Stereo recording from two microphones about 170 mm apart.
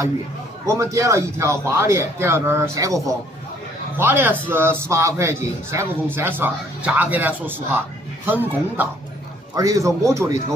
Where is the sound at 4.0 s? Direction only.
10° right (ahead or behind).